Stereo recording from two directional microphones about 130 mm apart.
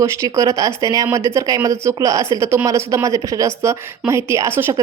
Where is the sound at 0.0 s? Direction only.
25° right (ahead or behind).